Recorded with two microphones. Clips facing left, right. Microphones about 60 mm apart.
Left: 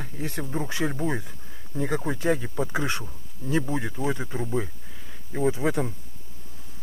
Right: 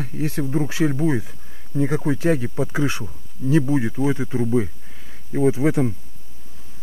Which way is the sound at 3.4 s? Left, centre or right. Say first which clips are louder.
Right 8 dB; right.